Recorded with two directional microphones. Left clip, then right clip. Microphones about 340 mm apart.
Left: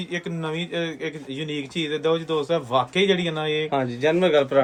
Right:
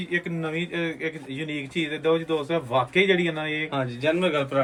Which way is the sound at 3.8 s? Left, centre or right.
Left.